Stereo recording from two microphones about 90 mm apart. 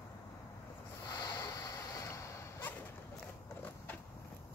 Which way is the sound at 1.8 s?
35° left (ahead or behind).